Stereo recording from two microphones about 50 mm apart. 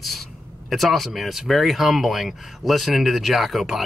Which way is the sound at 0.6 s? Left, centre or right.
Centre.